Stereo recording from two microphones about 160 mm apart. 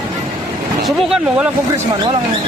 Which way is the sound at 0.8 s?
Centre (ahead or behind).